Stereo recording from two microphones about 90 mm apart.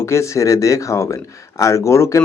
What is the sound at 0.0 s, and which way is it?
Speech, 30° left (ahead or behind).